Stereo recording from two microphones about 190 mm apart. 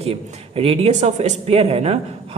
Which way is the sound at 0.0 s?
30° right (ahead or behind).